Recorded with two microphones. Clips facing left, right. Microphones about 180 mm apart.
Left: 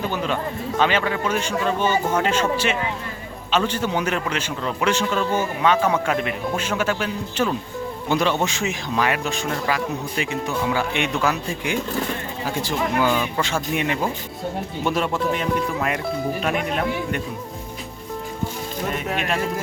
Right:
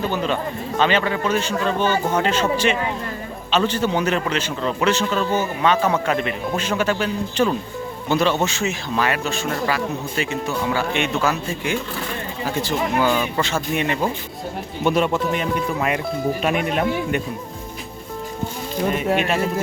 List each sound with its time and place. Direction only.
0.8 s a man's voice: 10° left (ahead or behind)
10.5 s speech: centre (ahead or behind)
10.8 s a man's voice: 15° left (ahead or behind)
13.1 s speech: 5° right (ahead or behind)
13.4 s a man's voice: 10° left (ahead or behind)
14.8 s speech: centre (ahead or behind)